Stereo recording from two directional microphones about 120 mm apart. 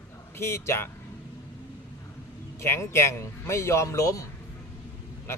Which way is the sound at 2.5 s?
25° left (ahead or behind).